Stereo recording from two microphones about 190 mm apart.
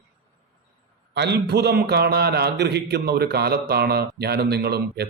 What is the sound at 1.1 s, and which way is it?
A man's voice, 65° right (ahead or behind).